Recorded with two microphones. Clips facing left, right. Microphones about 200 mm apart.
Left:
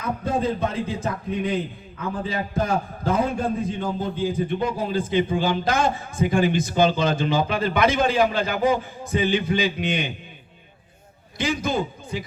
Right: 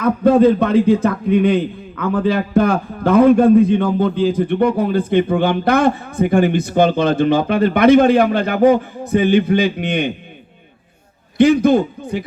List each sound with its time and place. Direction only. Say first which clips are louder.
0.0 s a man's voice: right 13 dB; 65° right (ahead or behind)
11.3 s a man's voice: right 13 dB; 60° right (ahead or behind)